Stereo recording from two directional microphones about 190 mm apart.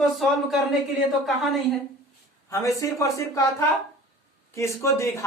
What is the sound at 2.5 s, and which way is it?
Speech, 15° left (ahead or behind).